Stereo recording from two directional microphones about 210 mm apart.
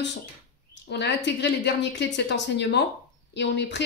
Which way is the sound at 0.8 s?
55° left (ahead or behind).